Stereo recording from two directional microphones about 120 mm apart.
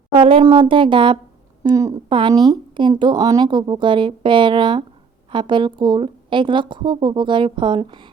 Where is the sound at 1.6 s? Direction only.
30° right (ahead or behind).